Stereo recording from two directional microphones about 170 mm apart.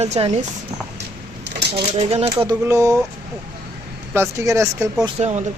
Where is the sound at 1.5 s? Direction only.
80° right.